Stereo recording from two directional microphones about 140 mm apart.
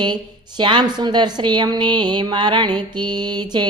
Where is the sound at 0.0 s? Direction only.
30° right (ahead or behind).